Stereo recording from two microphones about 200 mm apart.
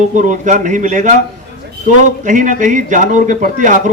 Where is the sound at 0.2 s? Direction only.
40° right (ahead or behind).